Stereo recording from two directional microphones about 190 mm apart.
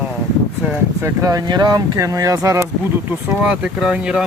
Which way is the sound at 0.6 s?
15° right (ahead or behind).